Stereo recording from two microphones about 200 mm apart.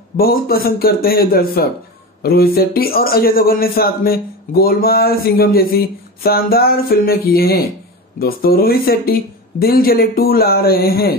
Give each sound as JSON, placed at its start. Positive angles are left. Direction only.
{"t": 0.2, "sound": "a man's voice", "side_deg": 50}